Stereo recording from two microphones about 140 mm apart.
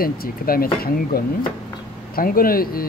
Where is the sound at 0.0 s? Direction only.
90° left.